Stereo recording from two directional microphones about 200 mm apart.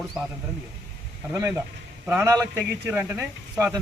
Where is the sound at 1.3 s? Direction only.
15° right (ahead or behind).